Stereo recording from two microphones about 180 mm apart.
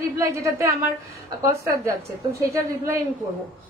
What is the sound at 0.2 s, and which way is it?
A woman's voice, 15° right (ahead or behind).